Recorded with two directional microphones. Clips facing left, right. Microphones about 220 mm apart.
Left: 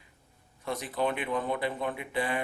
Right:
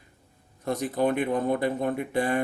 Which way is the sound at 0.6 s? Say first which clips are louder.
Right 5 dB; 40° right (ahead or behind).